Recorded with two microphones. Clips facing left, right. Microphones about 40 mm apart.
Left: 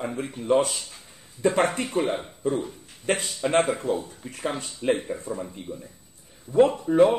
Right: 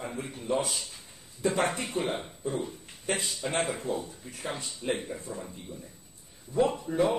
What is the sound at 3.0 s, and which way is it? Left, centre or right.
Speech, left.